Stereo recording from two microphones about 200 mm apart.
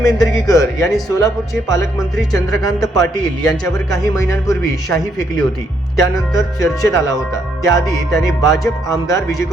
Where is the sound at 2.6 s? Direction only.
15° left (ahead or behind).